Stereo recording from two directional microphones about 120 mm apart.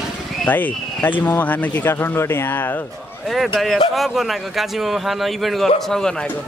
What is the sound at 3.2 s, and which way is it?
A man's voice, centre (ahead or behind).